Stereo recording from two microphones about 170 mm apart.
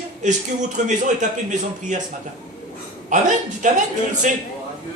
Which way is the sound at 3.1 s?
50° right (ahead or behind).